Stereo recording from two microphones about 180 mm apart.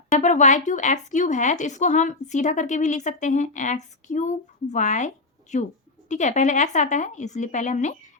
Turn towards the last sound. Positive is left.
turn(degrees=40)  # may be behind; listen again after turning